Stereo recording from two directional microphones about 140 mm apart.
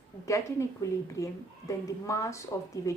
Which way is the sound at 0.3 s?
20° left (ahead or behind).